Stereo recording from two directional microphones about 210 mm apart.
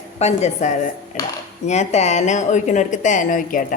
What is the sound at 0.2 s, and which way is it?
Speech, 30° left (ahead or behind).